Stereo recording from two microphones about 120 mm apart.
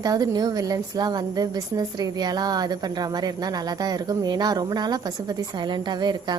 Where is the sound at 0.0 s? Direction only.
35° right (ahead or behind).